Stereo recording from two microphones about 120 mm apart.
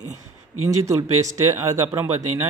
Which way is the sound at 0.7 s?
25° right (ahead or behind).